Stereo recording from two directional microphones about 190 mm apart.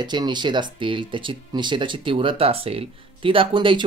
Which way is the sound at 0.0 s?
25° right (ahead or behind).